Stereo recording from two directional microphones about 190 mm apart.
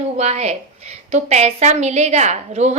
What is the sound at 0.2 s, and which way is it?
A woman's voice, 35° right (ahead or behind).